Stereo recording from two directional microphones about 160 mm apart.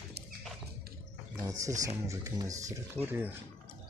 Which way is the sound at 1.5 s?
20° right (ahead or behind).